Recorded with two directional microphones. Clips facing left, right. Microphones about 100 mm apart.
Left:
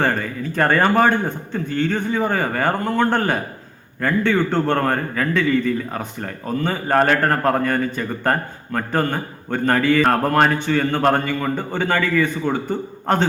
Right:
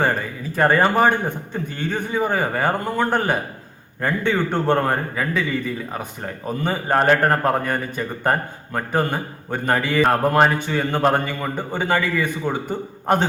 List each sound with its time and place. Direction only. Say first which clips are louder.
0.0 s a man's voice: left 1 dB; 10° right (ahead or behind)